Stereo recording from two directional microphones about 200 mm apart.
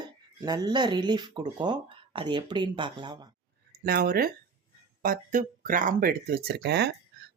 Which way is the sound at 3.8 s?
50° right (ahead or behind).